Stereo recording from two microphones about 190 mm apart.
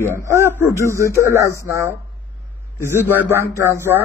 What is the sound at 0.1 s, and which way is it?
Speech, 15° right (ahead or behind).